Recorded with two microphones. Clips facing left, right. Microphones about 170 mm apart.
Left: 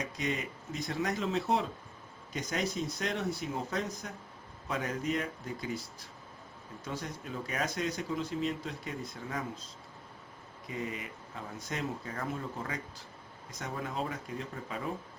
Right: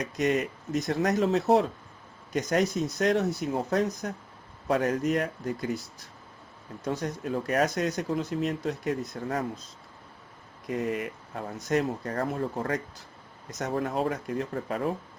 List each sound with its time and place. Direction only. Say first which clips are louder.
0.0 s speech: right 9 dB; 70° right (ahead or behind); by 4.2 s 55° right (ahead or behind)
4.7 s speech: right 8 dB; 65° right (ahead or behind)
6.8 s speech: right 9 dB; 50° right (ahead or behind)
10.7 s speech: right 9 dB; 65° right (ahead or behind)
13.8 s speech: right 8 dB; 60° right (ahead or behind)